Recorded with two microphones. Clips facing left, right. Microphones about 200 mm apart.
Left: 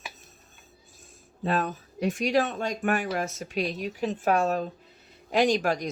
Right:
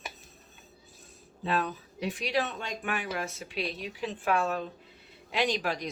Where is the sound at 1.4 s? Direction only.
45° left (ahead or behind).